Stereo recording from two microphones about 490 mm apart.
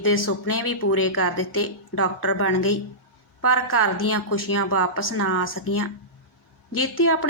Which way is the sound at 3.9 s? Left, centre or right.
Left.